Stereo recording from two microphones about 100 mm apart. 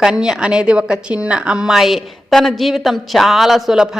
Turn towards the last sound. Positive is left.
turn(degrees=-5)  # may be behind; listen again after turning